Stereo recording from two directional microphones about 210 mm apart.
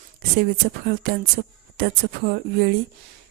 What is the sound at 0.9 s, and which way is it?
Speech, 50° right (ahead or behind).